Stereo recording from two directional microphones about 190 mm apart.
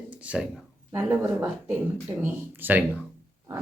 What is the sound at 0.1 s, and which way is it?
Speech, 5° right (ahead or behind).